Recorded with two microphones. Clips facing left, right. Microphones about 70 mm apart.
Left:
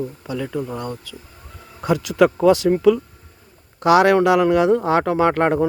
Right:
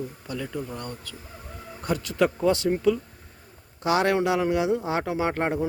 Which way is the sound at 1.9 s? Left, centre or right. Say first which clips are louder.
Left 8 dB; left.